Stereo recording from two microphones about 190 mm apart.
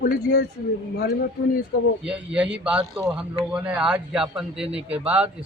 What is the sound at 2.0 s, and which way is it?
Speech, 5° right (ahead or behind).